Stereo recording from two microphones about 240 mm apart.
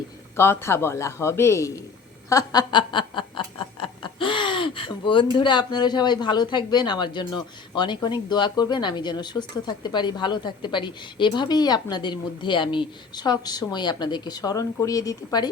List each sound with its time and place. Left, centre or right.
0.3 s snicker: centre